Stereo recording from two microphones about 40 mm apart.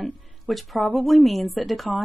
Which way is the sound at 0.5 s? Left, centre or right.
Centre.